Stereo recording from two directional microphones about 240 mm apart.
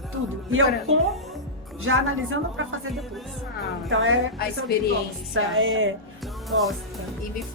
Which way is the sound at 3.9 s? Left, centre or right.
Right.